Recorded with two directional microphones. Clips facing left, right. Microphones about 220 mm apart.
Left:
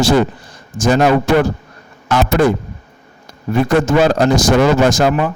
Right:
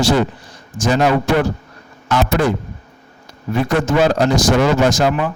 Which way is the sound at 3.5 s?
45° left (ahead or behind).